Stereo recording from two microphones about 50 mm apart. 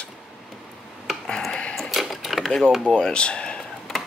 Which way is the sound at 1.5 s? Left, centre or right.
Left.